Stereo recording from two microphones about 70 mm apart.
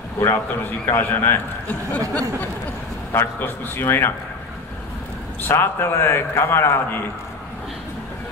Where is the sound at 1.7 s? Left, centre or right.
Left.